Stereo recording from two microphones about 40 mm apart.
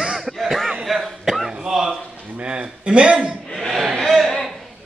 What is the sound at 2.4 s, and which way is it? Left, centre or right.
A man's voice, right.